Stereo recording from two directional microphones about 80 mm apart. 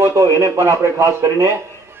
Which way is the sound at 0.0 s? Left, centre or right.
Right.